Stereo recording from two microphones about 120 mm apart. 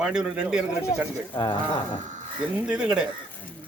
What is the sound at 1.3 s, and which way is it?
Speech, 45° left (ahead or behind).